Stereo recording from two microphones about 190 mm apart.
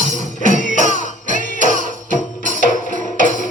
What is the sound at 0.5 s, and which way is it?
Music, 40° left (ahead or behind).